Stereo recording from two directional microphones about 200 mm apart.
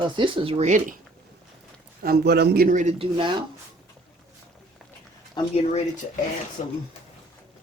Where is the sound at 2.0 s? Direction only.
55° right (ahead or behind); by 3.4 s 25° right (ahead or behind).